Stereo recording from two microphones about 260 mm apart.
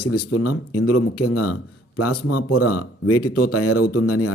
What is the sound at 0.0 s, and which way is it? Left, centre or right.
Speech, left.